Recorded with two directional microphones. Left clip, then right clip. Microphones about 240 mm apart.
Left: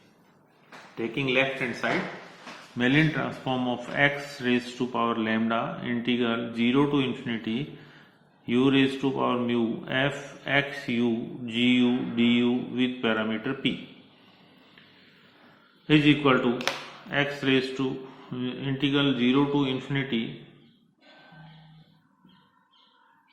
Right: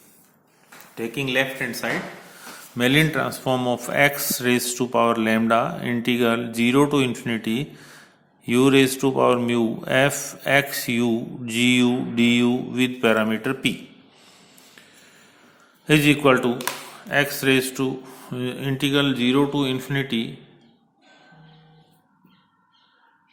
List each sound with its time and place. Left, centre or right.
0.9 s speech: right
15.9 s speech: right